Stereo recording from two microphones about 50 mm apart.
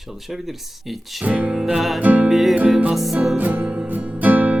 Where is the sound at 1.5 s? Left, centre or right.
Centre.